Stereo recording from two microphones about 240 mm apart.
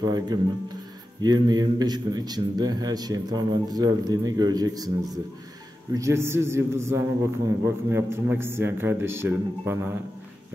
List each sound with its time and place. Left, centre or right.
0.0 s a man's voice: centre